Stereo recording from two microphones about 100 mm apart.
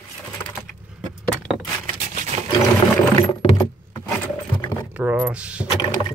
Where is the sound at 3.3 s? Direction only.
60° left (ahead or behind).